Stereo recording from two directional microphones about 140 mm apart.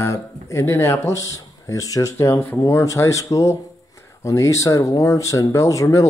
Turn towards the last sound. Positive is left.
turn(degrees=25)  # may be behind; listen again after turning